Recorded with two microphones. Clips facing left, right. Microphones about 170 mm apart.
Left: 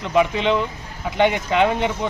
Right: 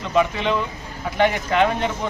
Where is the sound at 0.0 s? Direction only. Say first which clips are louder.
Left 2 dB; 15° left (ahead or behind).